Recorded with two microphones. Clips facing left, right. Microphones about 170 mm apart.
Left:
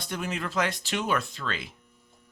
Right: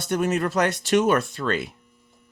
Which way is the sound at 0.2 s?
45° right (ahead or behind).